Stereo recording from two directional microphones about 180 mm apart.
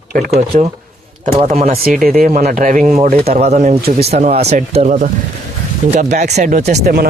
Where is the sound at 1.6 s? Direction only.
55° right (ahead or behind).